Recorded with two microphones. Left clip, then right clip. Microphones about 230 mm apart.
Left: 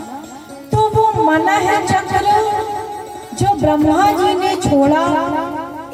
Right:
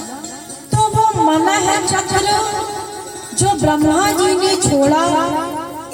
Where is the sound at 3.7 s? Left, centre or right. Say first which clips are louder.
Left 3 dB; left.